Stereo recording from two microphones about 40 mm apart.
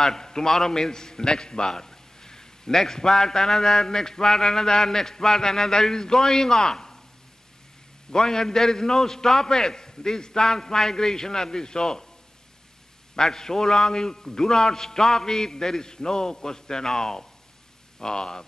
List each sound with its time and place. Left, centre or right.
0.0 s a man's voice: centre
8.1 s a man's voice: centre
13.1 s a man's voice: centre